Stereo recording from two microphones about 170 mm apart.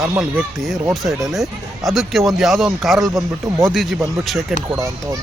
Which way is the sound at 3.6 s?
Centre (ahead or behind).